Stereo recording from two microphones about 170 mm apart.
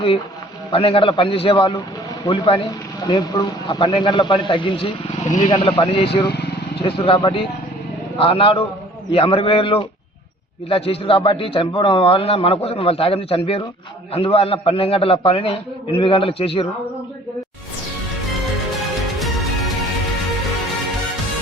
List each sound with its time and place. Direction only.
0.7 s a man's voice: 30° left (ahead or behind)